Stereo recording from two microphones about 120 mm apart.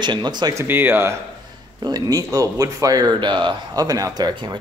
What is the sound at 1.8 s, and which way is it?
Speech, 30° right (ahead or behind).